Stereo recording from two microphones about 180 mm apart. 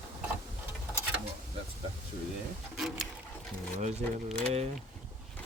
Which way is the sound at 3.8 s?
35° right (ahead or behind).